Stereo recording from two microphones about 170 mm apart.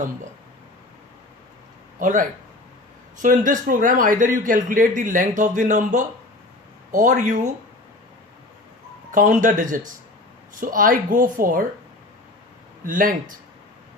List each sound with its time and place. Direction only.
2.0 s speech: 50° right (ahead or behind)
9.1 s speech: 50° right (ahead or behind)
12.8 s speech: 55° right (ahead or behind)